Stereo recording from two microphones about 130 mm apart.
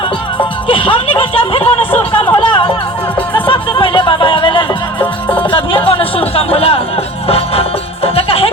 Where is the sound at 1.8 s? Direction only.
15° left (ahead or behind).